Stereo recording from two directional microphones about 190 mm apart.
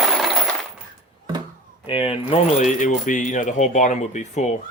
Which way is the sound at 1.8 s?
25° left (ahead or behind).